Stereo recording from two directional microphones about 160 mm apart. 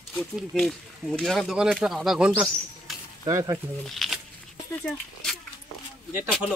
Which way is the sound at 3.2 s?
20° right (ahead or behind).